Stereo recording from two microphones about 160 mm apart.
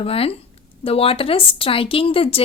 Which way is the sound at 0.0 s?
35° left (ahead or behind).